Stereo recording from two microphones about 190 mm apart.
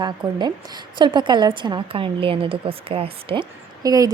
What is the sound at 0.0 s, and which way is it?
A woman's voice, 20° right (ahead or behind).